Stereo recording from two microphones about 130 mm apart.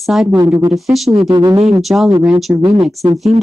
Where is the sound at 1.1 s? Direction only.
45° right (ahead or behind).